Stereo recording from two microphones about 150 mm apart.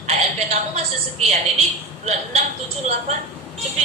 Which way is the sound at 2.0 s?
45° right (ahead or behind).